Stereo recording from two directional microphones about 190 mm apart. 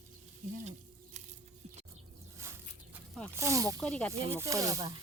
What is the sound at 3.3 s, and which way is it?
Snake, 15° right (ahead or behind).